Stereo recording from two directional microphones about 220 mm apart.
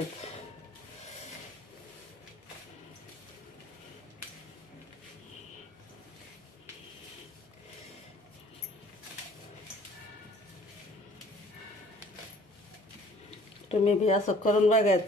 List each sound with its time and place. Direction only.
13.7 s speech: 30° left (ahead or behind)